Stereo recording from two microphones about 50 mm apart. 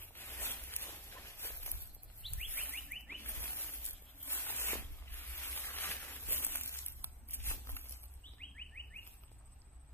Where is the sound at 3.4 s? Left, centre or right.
Left.